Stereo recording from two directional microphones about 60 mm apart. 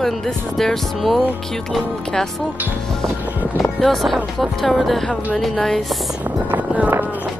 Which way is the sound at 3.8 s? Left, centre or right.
Centre.